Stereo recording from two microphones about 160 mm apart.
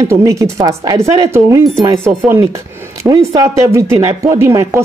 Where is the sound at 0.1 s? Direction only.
20° right (ahead or behind).